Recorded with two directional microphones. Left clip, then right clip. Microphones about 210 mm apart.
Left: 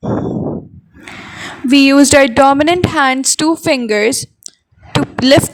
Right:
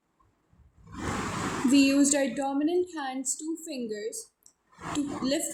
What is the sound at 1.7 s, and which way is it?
A woman's voice, 45° left (ahead or behind).